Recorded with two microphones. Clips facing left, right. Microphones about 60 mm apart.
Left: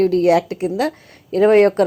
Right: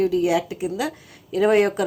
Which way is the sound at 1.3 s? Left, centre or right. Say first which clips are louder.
Left 6 dB; left.